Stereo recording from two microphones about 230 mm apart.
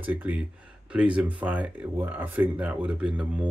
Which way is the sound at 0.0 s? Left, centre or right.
Centre.